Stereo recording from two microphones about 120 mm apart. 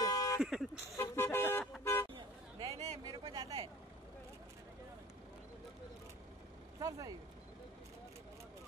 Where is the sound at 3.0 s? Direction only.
35° right (ahead or behind).